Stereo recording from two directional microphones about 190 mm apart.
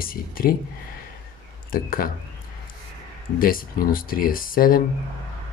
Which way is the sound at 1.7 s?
50° left (ahead or behind).